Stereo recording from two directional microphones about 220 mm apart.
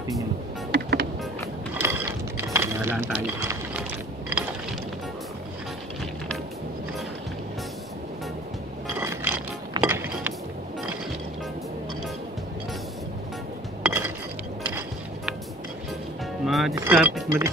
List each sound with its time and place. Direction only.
0.7 s music: 45° right (ahead or behind)
1.8 s dishes: 10° right (ahead or behind)
9.0 s music: 10° right (ahead or behind)
9.8 s a sound: 10° right (ahead or behind)
13.8 s chink: 10° right (ahead or behind)
16.4 s music: centre (ahead or behind)
16.7 s a sound: 10° right (ahead or behind)